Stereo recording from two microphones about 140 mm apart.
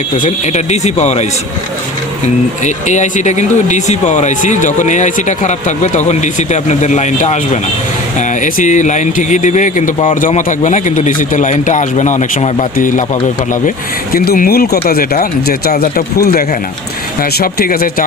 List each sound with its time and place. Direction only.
0.2 s speech: 55° left (ahead or behind)
2.6 s speech: 60° left (ahead or behind)
12.7 s speech: 70° left (ahead or behind); by 18.0 s 90° left